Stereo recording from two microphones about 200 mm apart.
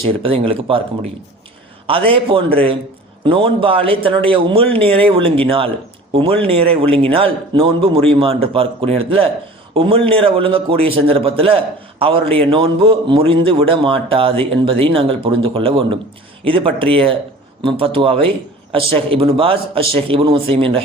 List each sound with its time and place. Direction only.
0.0 s a man's voice: 25° right (ahead or behind)
1.9 s a man's voice: 25° right (ahead or behind)